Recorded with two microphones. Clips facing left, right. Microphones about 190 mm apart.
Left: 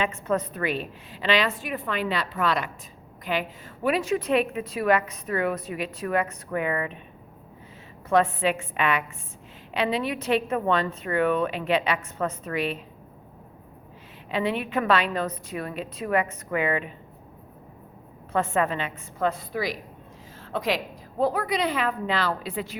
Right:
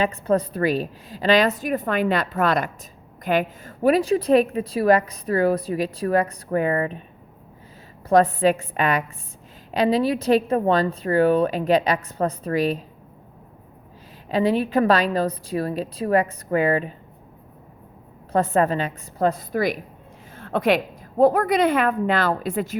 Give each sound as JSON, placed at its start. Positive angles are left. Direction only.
{"t": 0.0, "sound": "a woman's voice", "side_deg": -35}
{"t": 8.1, "sound": "a woman's voice", "side_deg": -40}
{"t": 14.3, "sound": "a woman's voice", "side_deg": -40}
{"t": 18.3, "sound": "a woman's voice", "side_deg": -40}